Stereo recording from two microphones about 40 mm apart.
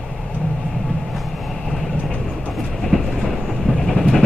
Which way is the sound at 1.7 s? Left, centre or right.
Centre.